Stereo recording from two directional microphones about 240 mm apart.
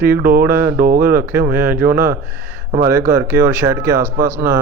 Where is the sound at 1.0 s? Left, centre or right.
Centre.